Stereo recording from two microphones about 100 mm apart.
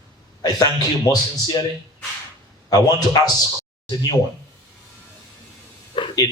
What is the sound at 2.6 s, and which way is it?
Speech, 40° left (ahead or behind).